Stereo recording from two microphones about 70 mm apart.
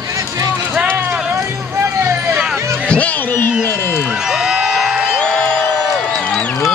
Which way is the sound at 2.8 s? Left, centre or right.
Centre.